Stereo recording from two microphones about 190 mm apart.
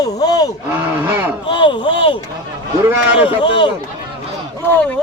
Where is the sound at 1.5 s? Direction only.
25° left (ahead or behind).